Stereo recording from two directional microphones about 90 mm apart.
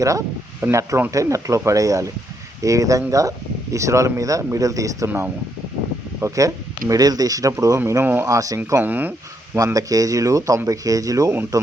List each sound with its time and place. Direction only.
0.0 s speech: 35° right (ahead or behind)
5.0 s speech: 25° right (ahead or behind)
8.0 s speech: 20° right (ahead or behind)
8.3 s speech: 40° right (ahead or behind)
8.8 s speech: 20° right (ahead or behind)
9.7 s speech: 40° right (ahead or behind)